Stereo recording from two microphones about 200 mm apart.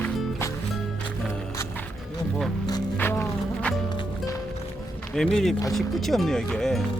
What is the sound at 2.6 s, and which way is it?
Music, 15° left (ahead or behind).